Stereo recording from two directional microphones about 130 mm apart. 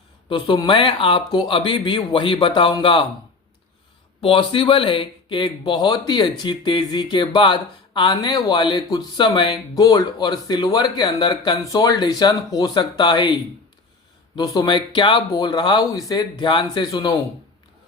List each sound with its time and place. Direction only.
0.3 s speech: 40° left (ahead or behind)
4.2 s speech: 45° left (ahead or behind)
14.3 s speech: 35° left (ahead or behind)